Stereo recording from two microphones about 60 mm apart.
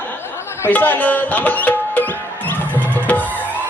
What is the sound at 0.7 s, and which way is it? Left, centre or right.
Music, left.